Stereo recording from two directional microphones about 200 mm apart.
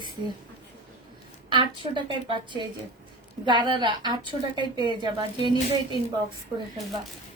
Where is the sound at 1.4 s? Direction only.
25° right (ahead or behind).